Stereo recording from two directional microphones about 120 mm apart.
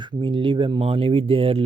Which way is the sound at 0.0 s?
40° right (ahead or behind).